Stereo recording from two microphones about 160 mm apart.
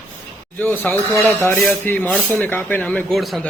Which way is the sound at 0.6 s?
10° left (ahead or behind).